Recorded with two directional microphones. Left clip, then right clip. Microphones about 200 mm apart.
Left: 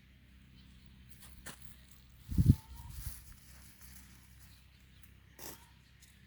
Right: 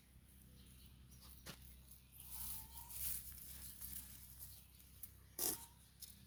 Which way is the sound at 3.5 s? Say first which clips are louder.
Even; 45° right (ahead or behind).